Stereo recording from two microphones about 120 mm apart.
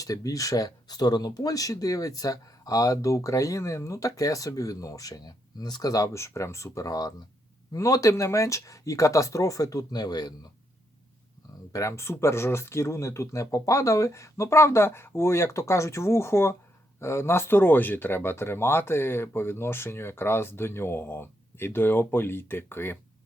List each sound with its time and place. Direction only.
0.0 s speech: 30° left (ahead or behind)
11.7 s speech: 25° left (ahead or behind)